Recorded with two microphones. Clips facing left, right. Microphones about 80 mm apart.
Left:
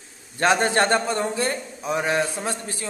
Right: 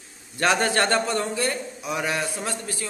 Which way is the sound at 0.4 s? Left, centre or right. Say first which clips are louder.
Left 2 dB; left.